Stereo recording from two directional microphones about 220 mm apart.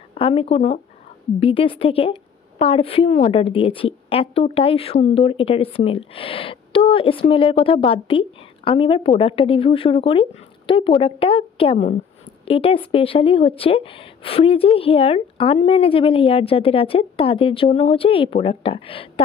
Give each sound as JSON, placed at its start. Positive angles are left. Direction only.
{"t": 0.1, "sound": "a woman's voice", "side_deg": 25}